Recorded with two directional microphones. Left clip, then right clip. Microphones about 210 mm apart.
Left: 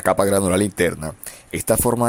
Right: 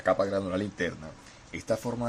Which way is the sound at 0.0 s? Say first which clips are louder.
Left 9 dB; 50° left (ahead or behind).